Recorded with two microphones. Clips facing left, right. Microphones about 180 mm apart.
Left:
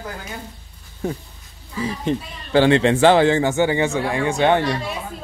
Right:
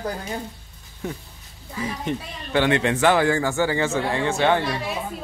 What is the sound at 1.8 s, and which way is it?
Speech, 30° left (ahead or behind).